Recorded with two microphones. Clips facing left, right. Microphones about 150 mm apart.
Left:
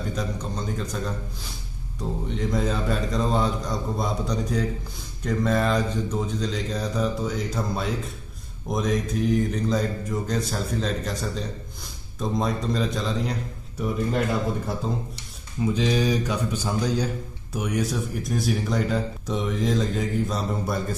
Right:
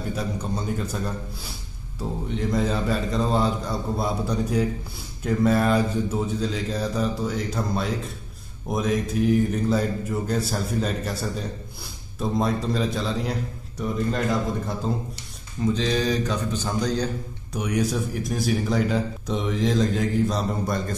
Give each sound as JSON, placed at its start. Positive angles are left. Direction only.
{"t": 0.1, "sound": "mantra", "side_deg": -10}
{"t": 2.2, "sound": "a man's voice", "side_deg": 0}
{"t": 8.6, "sound": "mantra", "side_deg": -5}
{"t": 12.2, "sound": "a man's voice", "side_deg": -5}
{"t": 15.6, "sound": "a man's voice", "side_deg": 10}